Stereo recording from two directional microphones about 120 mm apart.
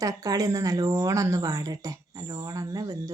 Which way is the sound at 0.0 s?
30° right (ahead or behind).